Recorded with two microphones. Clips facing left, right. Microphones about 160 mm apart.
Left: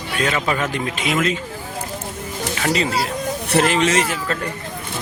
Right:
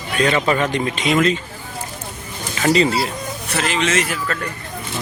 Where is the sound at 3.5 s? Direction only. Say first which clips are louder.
Left 5 dB; 50° left (ahead or behind).